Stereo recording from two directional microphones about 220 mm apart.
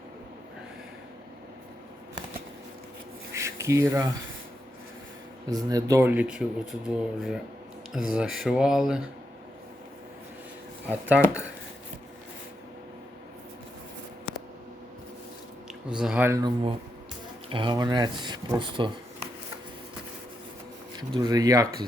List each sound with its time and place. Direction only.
3.3 s a sound: 15° right (ahead or behind)
5.5 s speech: 15° right (ahead or behind)
10.8 s speech: 5° right (ahead or behind)
15.9 s speech: 5° right (ahead or behind)
17.5 s speech: 20° right (ahead or behind)
20.9 s speech: 20° right (ahead or behind)